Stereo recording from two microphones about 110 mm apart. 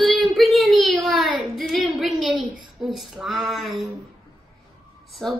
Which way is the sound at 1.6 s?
Centre (ahead or behind).